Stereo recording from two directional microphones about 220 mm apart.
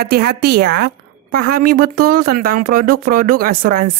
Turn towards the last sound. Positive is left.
turn(degrees=-40)  # may be behind; listen again after turning